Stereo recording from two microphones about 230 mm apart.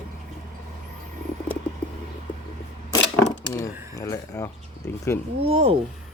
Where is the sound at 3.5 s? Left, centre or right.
Centre.